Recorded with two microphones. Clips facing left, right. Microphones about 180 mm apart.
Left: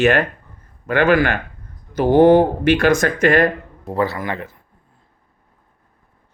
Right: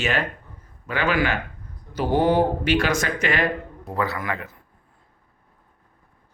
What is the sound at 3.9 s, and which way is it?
Speech, 30° left (ahead or behind).